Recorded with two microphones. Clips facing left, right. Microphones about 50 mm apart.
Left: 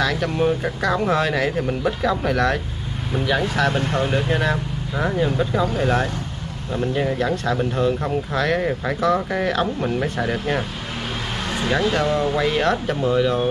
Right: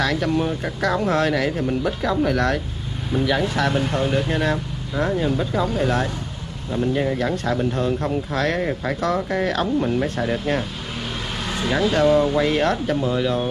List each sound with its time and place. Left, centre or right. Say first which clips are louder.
0.0 s speech: left 1 dB; centre
1.3 s speech: even; left
3.9 s speech: even; centre
8.5 s speech: left 1 dB; centre
11.6 s speech: right 2 dB; centre
12.4 s speech: even; left